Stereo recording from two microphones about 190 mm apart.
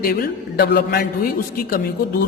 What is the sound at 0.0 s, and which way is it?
A man's voice, 50° left (ahead or behind).